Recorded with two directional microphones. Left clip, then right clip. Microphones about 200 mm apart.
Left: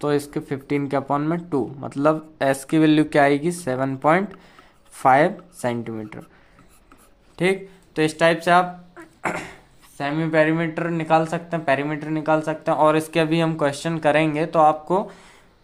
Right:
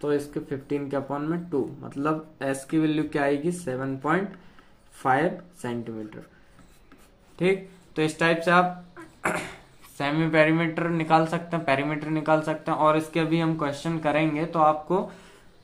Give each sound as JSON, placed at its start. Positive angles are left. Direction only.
{"t": 0.0, "sound": "speech", "side_deg": 60}
{"t": 7.3, "sound": "speech", "side_deg": 45}
{"t": 9.2, "sound": "dog", "side_deg": 15}
{"t": 10.0, "sound": "speech", "side_deg": 20}